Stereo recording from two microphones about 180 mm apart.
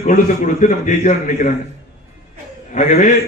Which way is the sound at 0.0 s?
40° left (ahead or behind).